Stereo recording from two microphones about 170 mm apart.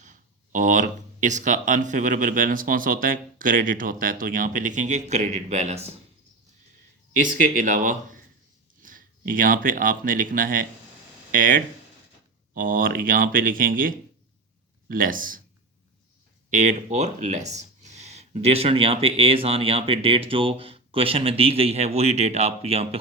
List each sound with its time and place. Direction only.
0.0 s speech: 45° right (ahead or behind)
7.2 s speech: 55° right (ahead or behind)
16.5 s speech: 45° right (ahead or behind)